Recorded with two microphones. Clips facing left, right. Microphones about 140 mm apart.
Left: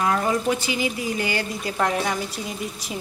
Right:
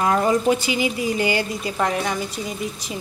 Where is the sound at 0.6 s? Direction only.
15° right (ahead or behind).